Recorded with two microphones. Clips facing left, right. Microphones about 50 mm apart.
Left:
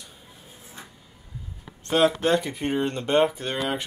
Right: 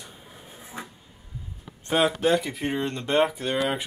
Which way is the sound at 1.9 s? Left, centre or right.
Centre.